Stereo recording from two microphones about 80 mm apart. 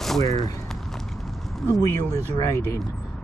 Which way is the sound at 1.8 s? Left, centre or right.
Left.